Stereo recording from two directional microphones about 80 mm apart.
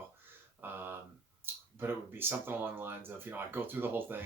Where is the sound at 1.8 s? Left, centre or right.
Right.